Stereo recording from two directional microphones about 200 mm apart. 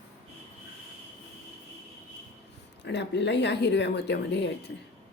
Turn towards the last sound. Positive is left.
turn(degrees=60)  # may be behind; listen again after turning